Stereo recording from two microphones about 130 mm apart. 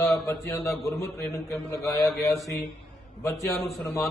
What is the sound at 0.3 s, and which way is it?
Speech, 20° left (ahead or behind).